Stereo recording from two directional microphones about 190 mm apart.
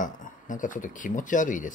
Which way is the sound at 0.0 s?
45° left (ahead or behind).